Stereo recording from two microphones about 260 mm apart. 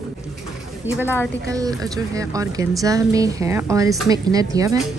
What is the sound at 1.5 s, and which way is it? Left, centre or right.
A woman's voice, centre.